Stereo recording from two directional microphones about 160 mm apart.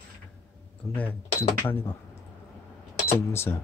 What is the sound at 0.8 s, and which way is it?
Speech, 15° left (ahead or behind).